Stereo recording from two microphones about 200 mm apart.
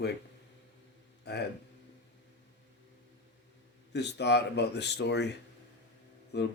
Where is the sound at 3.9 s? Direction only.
60° left (ahead or behind).